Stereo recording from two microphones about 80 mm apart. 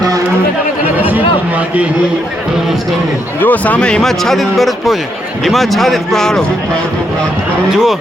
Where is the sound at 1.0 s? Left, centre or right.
Centre.